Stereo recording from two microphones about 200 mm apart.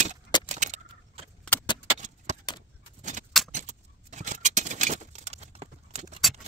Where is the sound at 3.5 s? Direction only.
40° right (ahead or behind).